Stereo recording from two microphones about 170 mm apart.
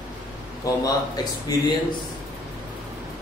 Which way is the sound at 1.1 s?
20° left (ahead or behind).